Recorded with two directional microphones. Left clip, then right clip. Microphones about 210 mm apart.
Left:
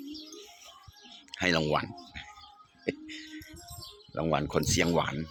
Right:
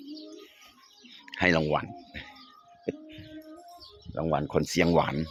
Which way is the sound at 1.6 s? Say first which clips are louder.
Right 1 dB; centre (ahead or behind).